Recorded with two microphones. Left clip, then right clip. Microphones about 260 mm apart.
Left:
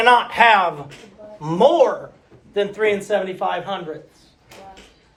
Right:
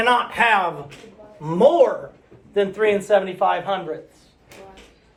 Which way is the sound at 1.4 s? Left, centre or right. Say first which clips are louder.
Even; centre.